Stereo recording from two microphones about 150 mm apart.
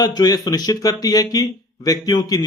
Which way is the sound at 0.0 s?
25° left (ahead or behind).